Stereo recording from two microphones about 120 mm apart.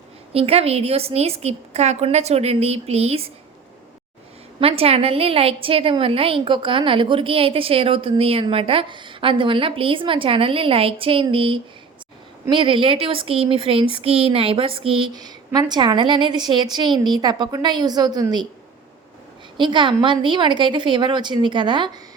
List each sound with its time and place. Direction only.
0.3 s a woman's voice: 55° right (ahead or behind)
4.6 s a woman's voice: 55° right (ahead or behind)
15.1 s a woman's voice: 35° right (ahead or behind)
19.5 s a woman's voice: 40° right (ahead or behind)